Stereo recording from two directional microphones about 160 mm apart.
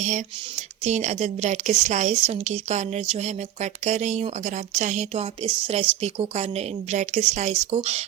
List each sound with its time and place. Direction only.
0.9 s a woman's voice: 45° right (ahead or behind)